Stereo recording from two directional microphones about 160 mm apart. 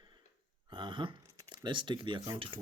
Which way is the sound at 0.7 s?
30° right (ahead or behind).